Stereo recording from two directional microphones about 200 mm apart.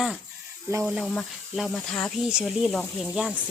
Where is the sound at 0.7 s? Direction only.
15° right (ahead or behind).